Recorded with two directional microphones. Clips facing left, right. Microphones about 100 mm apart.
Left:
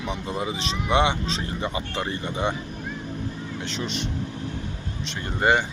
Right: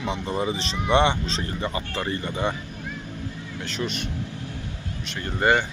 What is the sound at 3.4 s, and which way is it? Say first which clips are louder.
Vehicle: even; 25° left (ahead or behind).